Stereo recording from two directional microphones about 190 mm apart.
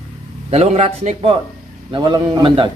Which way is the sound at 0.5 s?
35° right (ahead or behind).